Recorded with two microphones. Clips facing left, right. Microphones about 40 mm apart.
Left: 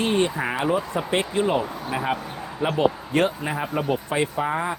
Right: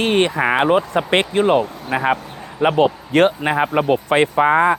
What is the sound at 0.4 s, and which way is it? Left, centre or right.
A man's voice, right.